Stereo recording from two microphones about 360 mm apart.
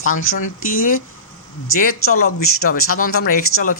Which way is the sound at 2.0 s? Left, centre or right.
Left.